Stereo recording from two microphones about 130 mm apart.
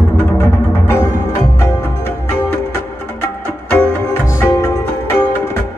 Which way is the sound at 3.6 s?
10° left (ahead or behind).